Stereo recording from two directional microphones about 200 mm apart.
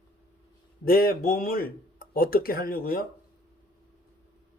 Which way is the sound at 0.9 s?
45° left (ahead or behind).